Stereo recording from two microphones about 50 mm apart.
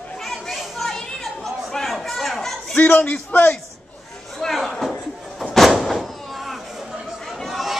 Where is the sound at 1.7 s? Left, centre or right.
Centre.